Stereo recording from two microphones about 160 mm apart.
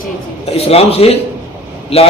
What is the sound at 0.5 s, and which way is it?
Speech, 40° left (ahead or behind).